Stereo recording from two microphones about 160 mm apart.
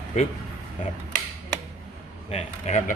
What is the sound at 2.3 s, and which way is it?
Speech, 45° left (ahead or behind).